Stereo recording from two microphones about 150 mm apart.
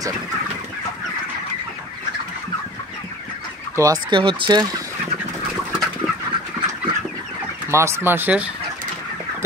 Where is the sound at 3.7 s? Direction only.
25° right (ahead or behind).